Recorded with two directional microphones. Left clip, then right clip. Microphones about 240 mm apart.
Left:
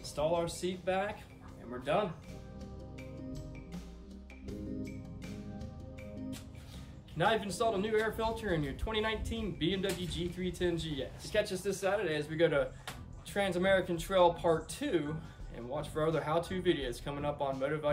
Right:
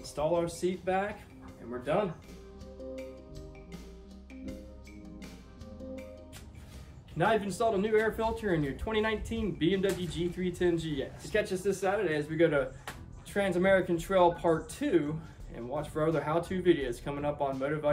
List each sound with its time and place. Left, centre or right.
0.0 s speech: centre
4.5 s music: centre
7.2 s speech: centre